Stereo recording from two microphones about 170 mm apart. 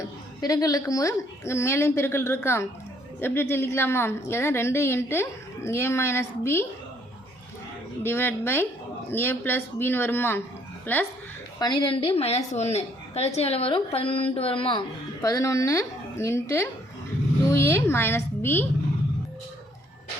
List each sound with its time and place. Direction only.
0.4 s a woman's voice: 20° left (ahead or behind)
8.0 s a woman's voice: 15° left (ahead or behind)
11.6 s a woman's voice: 30° left (ahead or behind); by 18.6 s 15° left (ahead or behind)